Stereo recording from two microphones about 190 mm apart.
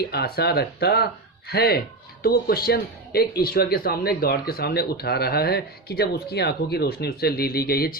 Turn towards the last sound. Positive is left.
turn(degrees=55)  # may be behind; listen again after turning